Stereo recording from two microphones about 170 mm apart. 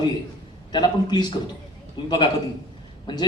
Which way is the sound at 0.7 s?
25° left (ahead or behind).